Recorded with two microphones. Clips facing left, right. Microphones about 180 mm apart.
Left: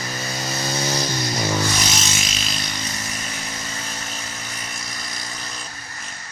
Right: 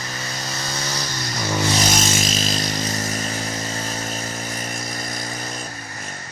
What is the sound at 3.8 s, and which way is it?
Chainsaw, 40° right (ahead or behind).